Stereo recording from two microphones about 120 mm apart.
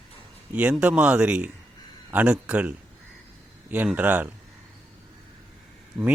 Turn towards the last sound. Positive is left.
turn(degrees=-10)  # may be behind; listen again after turning